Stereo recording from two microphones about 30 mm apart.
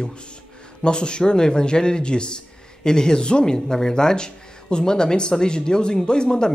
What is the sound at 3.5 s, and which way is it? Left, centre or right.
Speech, centre.